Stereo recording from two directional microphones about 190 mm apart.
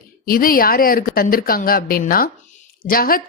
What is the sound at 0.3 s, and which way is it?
A woman's voice, 50° left (ahead or behind).